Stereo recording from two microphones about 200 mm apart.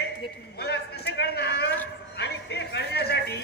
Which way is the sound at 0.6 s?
55° left (ahead or behind).